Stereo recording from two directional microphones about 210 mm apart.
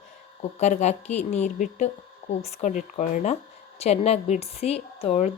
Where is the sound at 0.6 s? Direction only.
35° left (ahead or behind).